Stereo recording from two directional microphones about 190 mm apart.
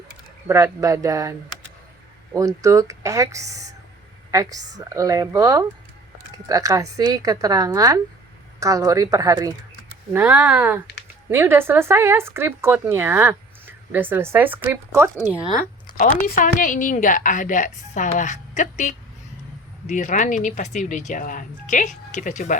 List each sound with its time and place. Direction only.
0.4 s a woman's voice: 15° right (ahead or behind)
16.2 s a woman's voice: 45° left (ahead or behind)